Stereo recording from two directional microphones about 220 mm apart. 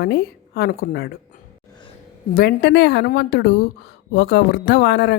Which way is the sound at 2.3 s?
45° left (ahead or behind).